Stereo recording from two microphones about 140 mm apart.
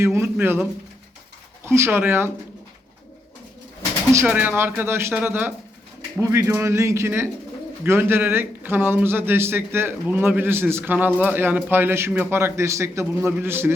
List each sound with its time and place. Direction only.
0.0 s speech: 15° right (ahead or behind)
1.6 s speech: 20° right (ahead or behind)
4.3 s speech: 10° right (ahead or behind)